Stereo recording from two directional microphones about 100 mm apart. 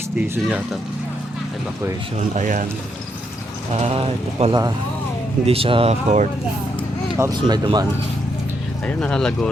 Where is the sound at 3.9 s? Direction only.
90° right.